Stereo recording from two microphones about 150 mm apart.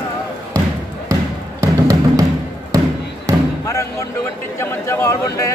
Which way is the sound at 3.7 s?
20° left (ahead or behind).